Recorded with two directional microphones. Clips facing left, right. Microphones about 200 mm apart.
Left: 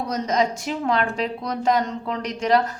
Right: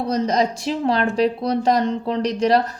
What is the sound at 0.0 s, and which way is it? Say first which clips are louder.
A woman's voice: right 3 dB; 35° right (ahead or behind).